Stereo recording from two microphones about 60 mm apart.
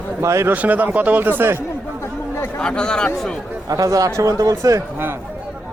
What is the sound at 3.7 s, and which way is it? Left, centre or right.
Speech, right.